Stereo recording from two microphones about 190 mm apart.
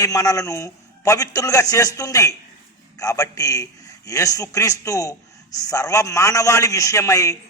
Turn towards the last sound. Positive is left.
turn(degrees=15)  # may be behind; listen again after turning